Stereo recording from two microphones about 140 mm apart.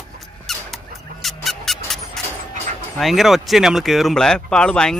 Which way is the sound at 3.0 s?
Centre (ahead or behind).